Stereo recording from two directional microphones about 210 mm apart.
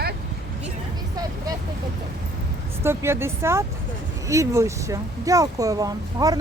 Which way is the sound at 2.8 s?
10° right (ahead or behind).